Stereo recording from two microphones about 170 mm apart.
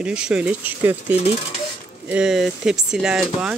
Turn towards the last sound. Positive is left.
turn(degrees=-5)  # may be behind; listen again after turning